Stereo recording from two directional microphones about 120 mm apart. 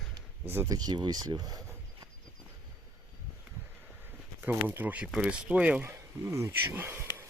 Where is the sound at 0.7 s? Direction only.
35° right (ahead or behind).